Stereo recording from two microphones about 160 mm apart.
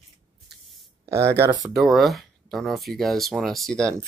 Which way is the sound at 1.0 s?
15° right (ahead or behind).